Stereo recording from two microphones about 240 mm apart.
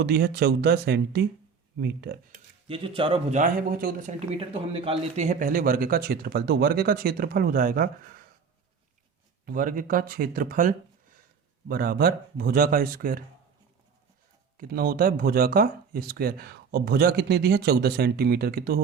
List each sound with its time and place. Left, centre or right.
0.0 s speech: right
2.6 s speech: right
9.5 s speech: right
14.6 s speech: right